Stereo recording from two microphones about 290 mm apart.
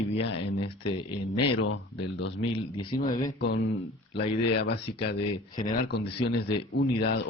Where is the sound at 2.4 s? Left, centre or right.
Centre.